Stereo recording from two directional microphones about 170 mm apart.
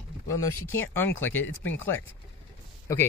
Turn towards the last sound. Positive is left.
turn(degrees=15)  # may be behind; listen again after turning